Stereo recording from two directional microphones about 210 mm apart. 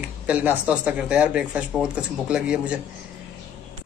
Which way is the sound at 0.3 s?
5° right (ahead or behind).